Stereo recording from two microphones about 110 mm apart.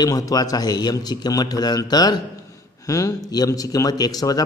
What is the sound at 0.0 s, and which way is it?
A man's voice, 35° left (ahead or behind).